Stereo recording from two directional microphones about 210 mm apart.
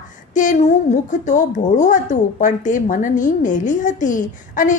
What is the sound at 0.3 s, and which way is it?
Speech, 35° left (ahead or behind).